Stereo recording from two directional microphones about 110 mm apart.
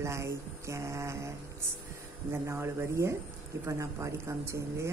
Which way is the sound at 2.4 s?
25° right (ahead or behind).